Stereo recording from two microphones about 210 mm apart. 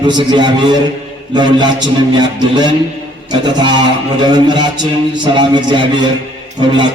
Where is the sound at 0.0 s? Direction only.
20° right (ahead or behind).